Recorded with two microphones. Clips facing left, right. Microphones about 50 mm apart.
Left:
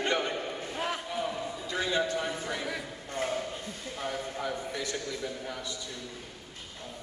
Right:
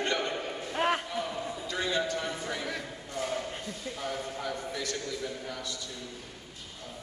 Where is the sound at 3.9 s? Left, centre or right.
Centre.